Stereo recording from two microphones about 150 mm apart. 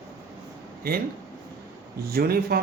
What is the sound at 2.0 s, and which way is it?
Speech, 90° right.